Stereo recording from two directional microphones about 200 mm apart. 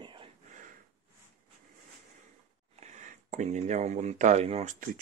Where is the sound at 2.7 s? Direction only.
35° right (ahead or behind).